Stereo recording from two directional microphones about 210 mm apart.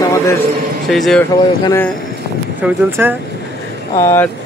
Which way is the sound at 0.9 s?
Centre (ahead or behind).